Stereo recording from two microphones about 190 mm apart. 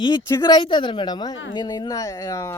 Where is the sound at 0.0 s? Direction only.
20° left (ahead or behind).